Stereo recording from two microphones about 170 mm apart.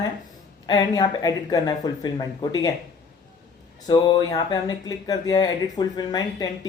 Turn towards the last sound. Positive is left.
turn(degrees=25)  # may be behind; listen again after turning